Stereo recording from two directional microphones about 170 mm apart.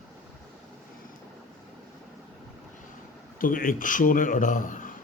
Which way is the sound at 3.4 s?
55° left (ahead or behind).